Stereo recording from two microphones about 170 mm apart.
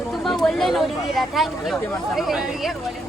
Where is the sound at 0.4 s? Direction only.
Centre (ahead or behind).